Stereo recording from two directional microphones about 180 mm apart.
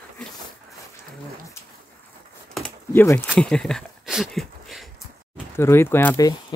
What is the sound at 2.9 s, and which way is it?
Speech, 10° left (ahead or behind).